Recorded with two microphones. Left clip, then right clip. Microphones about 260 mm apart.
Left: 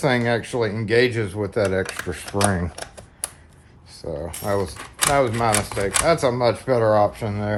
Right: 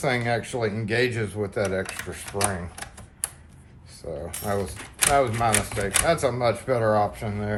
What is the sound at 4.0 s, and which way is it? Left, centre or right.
Speech, left.